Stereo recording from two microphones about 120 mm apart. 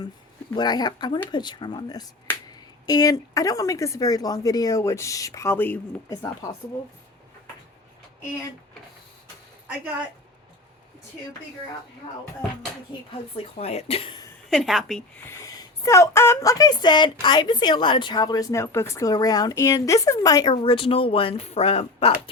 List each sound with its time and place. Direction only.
0.5 s speech: 35° left (ahead or behind); by 5.8 s 15° left (ahead or behind)
6.1 s speech: 30° left (ahead or behind)
13.3 s speech: 55° left (ahead or behind)
14.5 s a woman's voice: centre (ahead or behind)
15.3 s speech: 25° left (ahead or behind)
20.5 s speech: 45° left (ahead or behind)